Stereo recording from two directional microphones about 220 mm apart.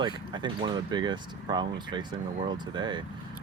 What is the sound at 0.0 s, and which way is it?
Speech, 20° right (ahead or behind).